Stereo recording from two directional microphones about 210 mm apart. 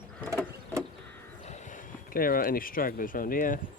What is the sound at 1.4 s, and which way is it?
Speech, 35° left (ahead or behind).